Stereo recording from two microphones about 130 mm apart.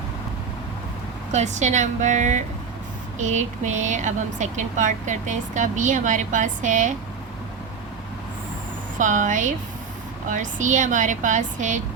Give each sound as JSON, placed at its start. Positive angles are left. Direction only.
{"t": 1.3, "sound": "speech", "side_deg": -65}
{"t": 9.0, "sound": "speech", "side_deg": -75}